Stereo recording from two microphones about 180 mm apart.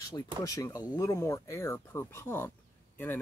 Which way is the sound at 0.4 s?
20° left (ahead or behind).